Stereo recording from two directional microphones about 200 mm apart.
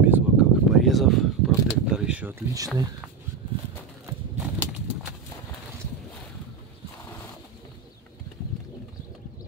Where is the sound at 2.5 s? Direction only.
15° right (ahead or behind).